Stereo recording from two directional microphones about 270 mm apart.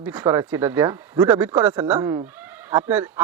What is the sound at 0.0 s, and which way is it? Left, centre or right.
Speech, centre.